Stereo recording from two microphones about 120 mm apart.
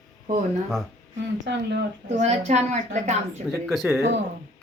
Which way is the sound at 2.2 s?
70° right (ahead or behind).